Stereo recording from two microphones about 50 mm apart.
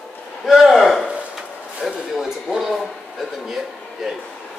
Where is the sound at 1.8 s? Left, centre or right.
Centre.